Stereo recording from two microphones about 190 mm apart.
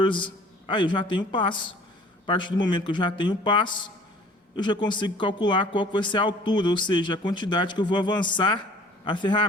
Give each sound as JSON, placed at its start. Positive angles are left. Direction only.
{"t": 0.0, "sound": "a man's voice", "side_deg": 25}